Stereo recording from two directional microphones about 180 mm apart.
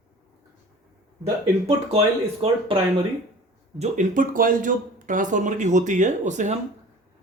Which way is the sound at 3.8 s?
45° right (ahead or behind).